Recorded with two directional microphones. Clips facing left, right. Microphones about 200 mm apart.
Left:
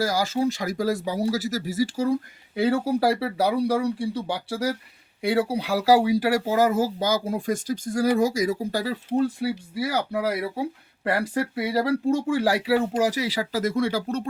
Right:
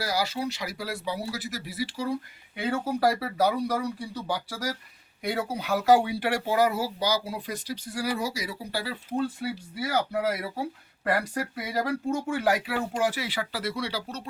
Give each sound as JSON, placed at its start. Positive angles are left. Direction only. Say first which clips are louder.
{"t": 0.0, "sound": "speech", "louder": "left 6 dB", "side_deg": 45}
{"t": 2.6, "sound": "speech", "louder": "left 5 dB", "side_deg": 35}
{"t": 11.0, "sound": "speech", "louder": "left 3 dB", "side_deg": 30}